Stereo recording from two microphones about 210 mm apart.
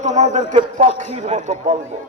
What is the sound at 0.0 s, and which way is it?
A man's voice, 35° right (ahead or behind).